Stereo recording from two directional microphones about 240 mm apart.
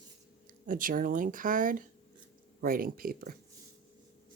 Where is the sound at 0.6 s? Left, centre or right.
Right.